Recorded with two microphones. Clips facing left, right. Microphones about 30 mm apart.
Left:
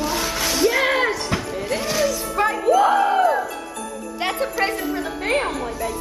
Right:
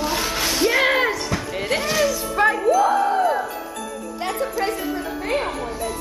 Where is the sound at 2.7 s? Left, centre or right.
Left.